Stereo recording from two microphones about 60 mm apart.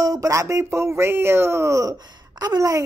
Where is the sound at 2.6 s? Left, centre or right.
Right.